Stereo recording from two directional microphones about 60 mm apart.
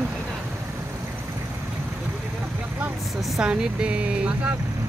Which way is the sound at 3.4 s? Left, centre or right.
Centre.